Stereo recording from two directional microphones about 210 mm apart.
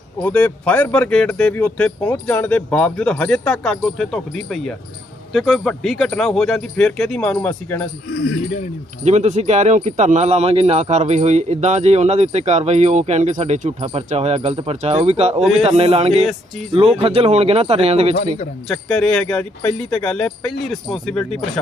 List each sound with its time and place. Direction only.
0.2 s speech: 5° left (ahead or behind)
9.0 s speech: 35° right (ahead or behind)
18.7 s speech: 5° left (ahead or behind)